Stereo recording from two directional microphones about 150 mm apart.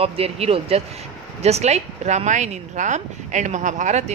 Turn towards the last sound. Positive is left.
turn(degrees=-55)  # may be behind; listen again after turning